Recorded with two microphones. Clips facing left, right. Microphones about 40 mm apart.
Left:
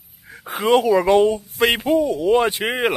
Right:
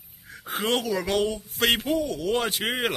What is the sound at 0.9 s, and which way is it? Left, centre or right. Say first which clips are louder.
Speech: left 10 dB; centre.